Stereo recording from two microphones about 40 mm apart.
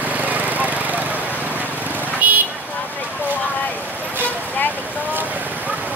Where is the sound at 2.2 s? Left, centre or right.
Right.